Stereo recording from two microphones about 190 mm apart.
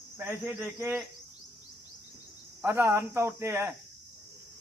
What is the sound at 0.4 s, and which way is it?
Cricket, 10° right (ahead or behind).